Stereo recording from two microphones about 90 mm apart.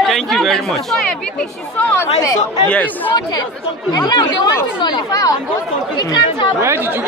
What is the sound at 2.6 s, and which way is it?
Speech, 15° left (ahead or behind).